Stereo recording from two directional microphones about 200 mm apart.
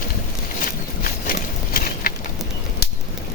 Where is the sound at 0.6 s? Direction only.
45° left (ahead or behind).